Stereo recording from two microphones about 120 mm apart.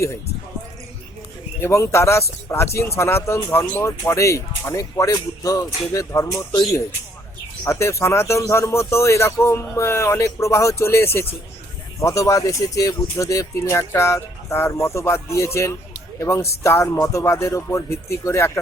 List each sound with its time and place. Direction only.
1.6 s speech: 25° left (ahead or behind)
7.6 s speech: 25° left (ahead or behind)